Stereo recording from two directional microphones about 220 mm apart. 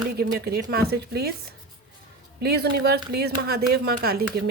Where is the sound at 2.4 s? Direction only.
45° right (ahead or behind).